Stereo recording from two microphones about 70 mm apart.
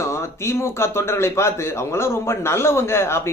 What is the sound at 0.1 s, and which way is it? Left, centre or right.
Speech, left.